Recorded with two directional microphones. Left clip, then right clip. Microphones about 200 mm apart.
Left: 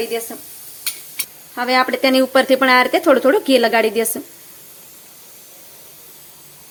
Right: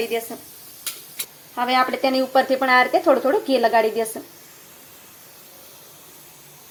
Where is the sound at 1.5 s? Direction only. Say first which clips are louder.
Left 3 dB; 15° left (ahead or behind).